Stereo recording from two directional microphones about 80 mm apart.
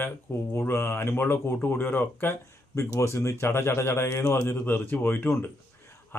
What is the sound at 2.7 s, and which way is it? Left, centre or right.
Speech, left.